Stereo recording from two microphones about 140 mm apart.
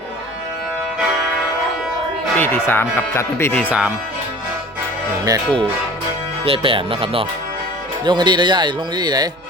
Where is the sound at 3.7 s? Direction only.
10° right (ahead or behind).